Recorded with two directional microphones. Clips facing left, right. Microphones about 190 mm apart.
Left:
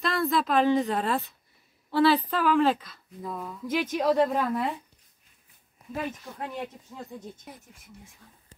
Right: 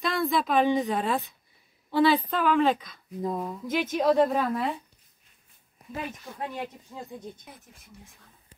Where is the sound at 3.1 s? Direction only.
40° right (ahead or behind).